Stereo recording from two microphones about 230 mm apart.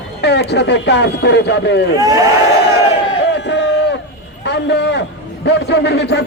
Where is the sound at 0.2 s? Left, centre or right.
Left.